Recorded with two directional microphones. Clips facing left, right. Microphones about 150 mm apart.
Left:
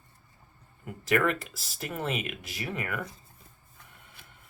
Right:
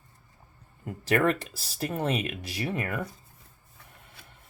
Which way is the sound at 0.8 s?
35° right (ahead or behind).